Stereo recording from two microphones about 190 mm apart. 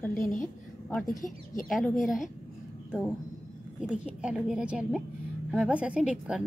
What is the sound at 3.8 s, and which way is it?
A woman's voice, 5° right (ahead or behind).